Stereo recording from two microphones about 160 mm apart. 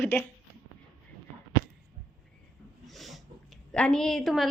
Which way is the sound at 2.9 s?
Centre (ahead or behind).